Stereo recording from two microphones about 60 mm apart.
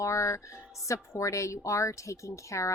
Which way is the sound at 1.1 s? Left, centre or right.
Left.